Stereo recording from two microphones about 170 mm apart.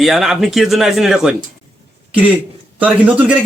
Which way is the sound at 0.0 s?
Centre (ahead or behind).